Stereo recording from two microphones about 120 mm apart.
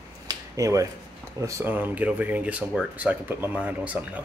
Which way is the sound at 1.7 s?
15° right (ahead or behind).